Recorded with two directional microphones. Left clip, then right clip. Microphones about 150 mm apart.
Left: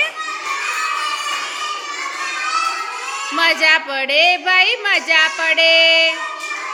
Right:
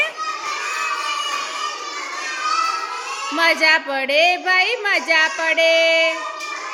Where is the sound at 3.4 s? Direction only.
20° right (ahead or behind).